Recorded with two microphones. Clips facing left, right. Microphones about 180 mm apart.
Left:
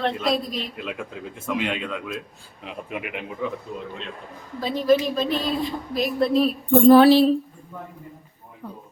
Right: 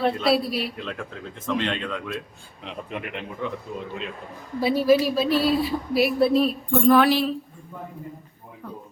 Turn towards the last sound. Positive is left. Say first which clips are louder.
# left 6 dB
turn(degrees=30)  # may be behind; listen again after turning